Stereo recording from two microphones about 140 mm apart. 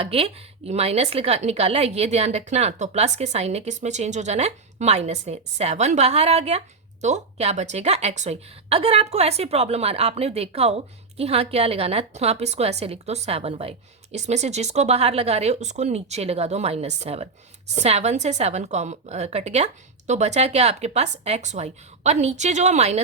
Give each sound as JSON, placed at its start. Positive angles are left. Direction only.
{"t": 0.0, "sound": "a woman's voice", "side_deg": -45}